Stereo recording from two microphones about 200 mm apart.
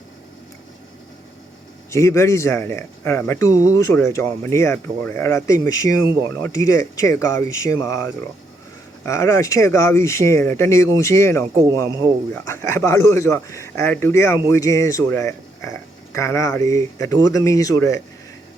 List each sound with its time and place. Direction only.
1.9 s speech: 15° left (ahead or behind)
9.0 s speech: 15° left (ahead or behind)